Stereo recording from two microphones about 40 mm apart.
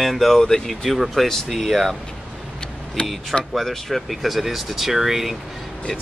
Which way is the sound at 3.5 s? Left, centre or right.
Centre.